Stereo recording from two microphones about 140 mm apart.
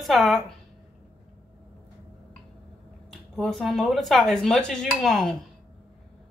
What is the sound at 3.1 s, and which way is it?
Speech, 5° left (ahead or behind).